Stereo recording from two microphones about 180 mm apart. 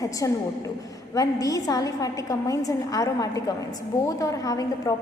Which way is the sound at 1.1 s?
20° left (ahead or behind).